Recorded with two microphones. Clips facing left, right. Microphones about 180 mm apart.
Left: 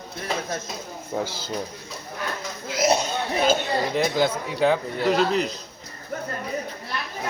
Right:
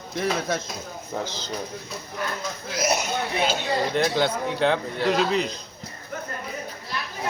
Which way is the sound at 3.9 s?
Centre (ahead or behind).